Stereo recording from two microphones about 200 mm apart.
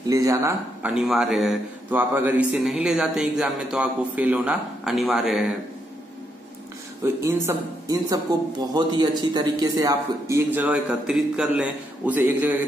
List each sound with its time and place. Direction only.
0.0 s speech: 15° right (ahead or behind)
0.9 s a man's voice: 5° right (ahead or behind)
7.2 s a man's voice: 15° right (ahead or behind)